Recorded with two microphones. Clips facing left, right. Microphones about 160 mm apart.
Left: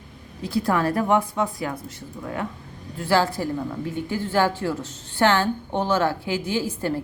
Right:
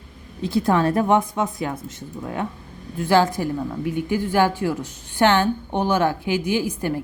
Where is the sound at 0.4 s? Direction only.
20° right (ahead or behind).